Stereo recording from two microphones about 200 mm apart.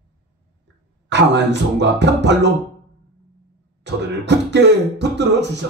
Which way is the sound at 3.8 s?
60° right (ahead or behind).